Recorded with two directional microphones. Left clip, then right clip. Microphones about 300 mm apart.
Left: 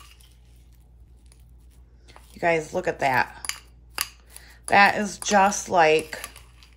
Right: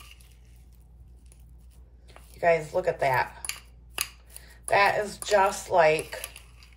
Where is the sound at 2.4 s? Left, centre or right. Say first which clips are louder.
Even; left.